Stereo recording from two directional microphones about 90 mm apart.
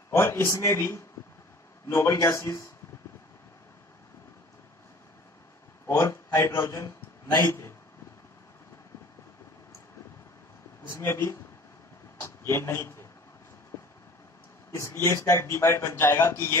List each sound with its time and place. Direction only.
0.1 s a man's voice: 30° left (ahead or behind)
5.9 s a man's voice: 30° left (ahead or behind)
10.9 s speech: 25° left (ahead or behind)
12.2 s a sound: 30° left (ahead or behind)
13.7 s vehicle: 35° left (ahead or behind)
14.7 s a man's voice: 30° left (ahead or behind)